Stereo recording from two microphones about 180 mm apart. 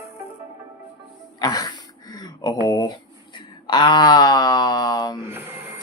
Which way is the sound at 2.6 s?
20° left (ahead or behind).